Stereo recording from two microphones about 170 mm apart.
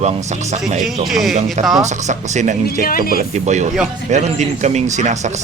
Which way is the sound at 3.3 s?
45° right (ahead or behind).